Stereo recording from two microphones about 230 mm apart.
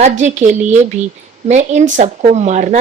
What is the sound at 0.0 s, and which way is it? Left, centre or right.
Speech, right.